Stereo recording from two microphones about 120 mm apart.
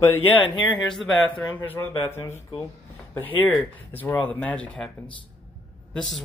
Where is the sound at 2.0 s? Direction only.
20° left (ahead or behind); by 6.2 s centre (ahead or behind).